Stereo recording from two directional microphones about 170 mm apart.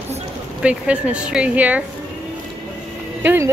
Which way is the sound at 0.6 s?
5° right (ahead or behind).